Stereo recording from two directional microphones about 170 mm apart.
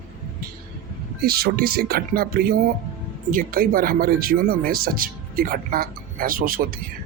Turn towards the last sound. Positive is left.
turn(degrees=-55)  # may be behind; listen again after turning